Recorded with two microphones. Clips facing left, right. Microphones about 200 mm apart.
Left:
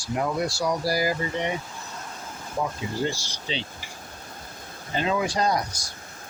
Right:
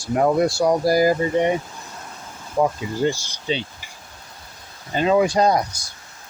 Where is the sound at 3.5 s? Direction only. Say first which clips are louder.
Right 7 dB; 50° right (ahead or behind).